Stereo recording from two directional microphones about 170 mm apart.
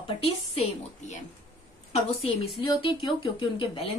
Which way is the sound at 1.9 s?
40° left (ahead or behind).